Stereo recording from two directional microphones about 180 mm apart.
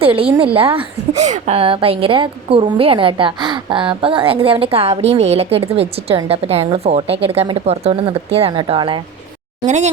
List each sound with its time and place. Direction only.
0.2 s a woman's voice: 30° right (ahead or behind)
9.6 s a woman's voice: 40° right (ahead or behind)